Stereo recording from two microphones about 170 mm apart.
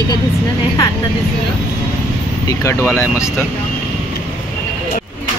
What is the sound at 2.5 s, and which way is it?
Speech, 15° left (ahead or behind).